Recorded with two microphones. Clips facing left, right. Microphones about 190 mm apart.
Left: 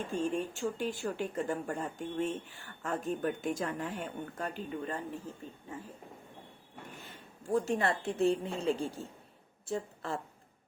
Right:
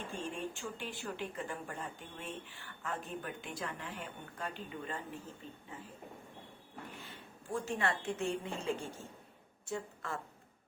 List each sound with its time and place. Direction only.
0.1 s a woman's voice: 40° left (ahead or behind)
7.0 s a woman's voice: 40° left (ahead or behind)